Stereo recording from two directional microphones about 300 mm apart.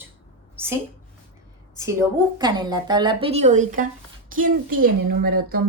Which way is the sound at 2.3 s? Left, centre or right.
Centre.